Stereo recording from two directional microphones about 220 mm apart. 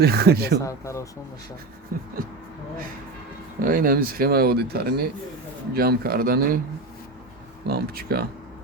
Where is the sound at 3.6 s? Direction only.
40° right (ahead or behind).